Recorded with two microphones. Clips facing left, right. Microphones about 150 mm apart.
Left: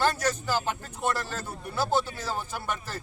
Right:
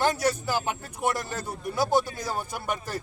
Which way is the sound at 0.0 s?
15° right (ahead or behind).